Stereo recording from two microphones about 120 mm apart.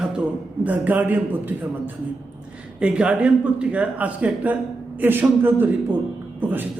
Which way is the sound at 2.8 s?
10° right (ahead or behind).